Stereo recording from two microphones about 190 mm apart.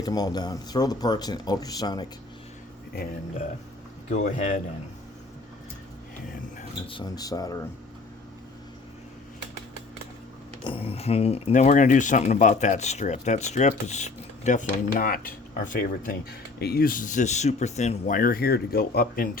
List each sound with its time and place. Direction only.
0.0 s speech: 20° left (ahead or behind)
4.1 s speech: 40° left (ahead or behind)
6.8 s speech: 25° left (ahead or behind)
10.6 s speech: 25° left (ahead or behind); by 19.3 s 50° left (ahead or behind)